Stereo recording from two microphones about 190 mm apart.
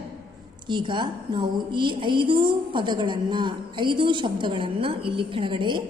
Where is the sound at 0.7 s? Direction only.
25° right (ahead or behind).